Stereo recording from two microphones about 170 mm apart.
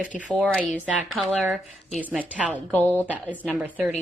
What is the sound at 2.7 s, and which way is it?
Speech, 10° left (ahead or behind).